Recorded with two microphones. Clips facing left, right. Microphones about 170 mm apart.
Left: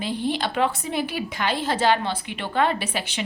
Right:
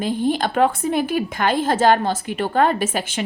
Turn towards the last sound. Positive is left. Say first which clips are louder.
# right 5 dB
turn(degrees=-45)  # may be behind; listen again after turning